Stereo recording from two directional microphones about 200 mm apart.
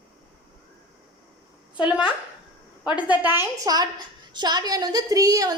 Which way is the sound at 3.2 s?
10° right (ahead or behind).